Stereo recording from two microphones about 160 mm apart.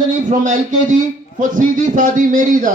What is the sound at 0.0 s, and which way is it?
A man's voice, 50° right (ahead or behind).